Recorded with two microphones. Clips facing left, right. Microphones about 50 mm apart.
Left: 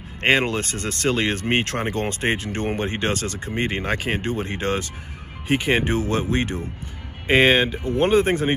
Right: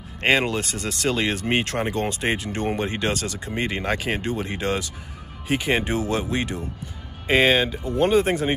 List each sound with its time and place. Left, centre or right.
0.2 s speech: left